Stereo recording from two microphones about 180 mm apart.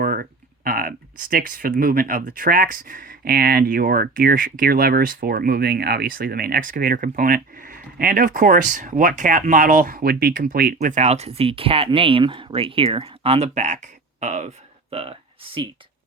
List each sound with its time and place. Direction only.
0.0 s speech: 55° right (ahead or behind); by 15.7 s 30° right (ahead or behind)